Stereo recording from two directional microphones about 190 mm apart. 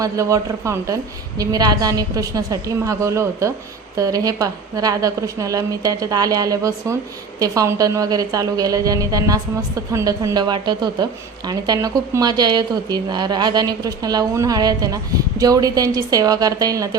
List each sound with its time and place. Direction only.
0.0 s a woman's voice: 15° right (ahead or behind)